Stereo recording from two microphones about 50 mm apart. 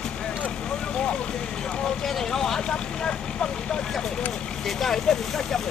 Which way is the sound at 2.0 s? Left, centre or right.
Centre.